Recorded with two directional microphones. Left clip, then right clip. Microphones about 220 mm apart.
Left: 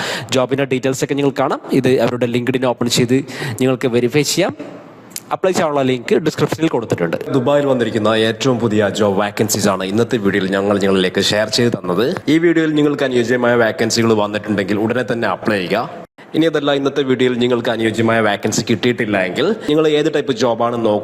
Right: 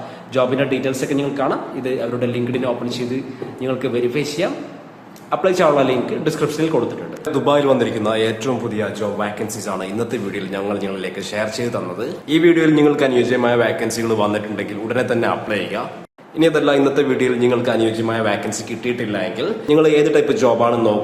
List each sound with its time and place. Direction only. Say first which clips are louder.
0.3 s speech: even; 50° left (ahead or behind)
7.3 s a man's voice: even; 20° left (ahead or behind)